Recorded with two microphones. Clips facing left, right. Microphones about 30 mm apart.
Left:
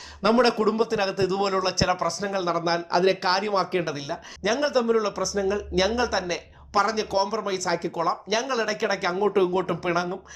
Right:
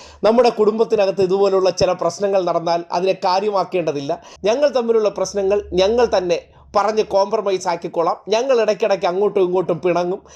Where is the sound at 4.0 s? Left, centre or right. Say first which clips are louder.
Right 8 dB; centre.